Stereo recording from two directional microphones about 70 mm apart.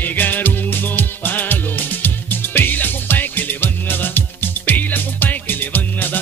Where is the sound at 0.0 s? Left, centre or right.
Left.